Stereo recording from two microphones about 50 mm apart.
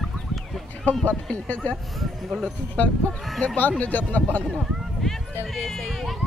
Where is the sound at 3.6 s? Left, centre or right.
Left.